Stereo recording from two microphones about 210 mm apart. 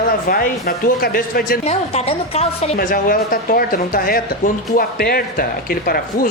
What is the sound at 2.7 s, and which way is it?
Speech, 45° left (ahead or behind).